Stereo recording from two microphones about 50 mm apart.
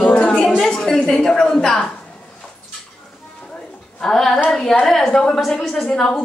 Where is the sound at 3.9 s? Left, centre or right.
Centre.